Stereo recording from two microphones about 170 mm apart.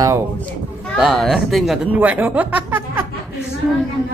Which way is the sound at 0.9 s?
Centre (ahead or behind).